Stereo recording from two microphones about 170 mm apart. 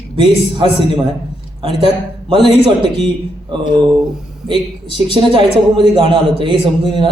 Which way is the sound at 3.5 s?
30° right (ahead or behind).